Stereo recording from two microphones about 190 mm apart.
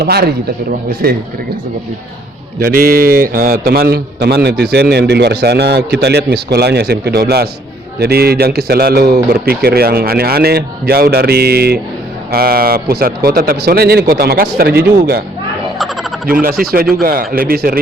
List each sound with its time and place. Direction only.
0.0 s a man's voice: 55° right (ahead or behind)
2.6 s a man's voice: 50° right (ahead or behind)
16.2 s a man's voice: 50° right (ahead or behind)